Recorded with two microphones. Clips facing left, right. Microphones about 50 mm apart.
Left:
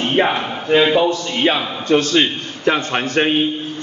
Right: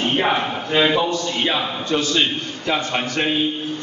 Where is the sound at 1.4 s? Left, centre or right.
Left.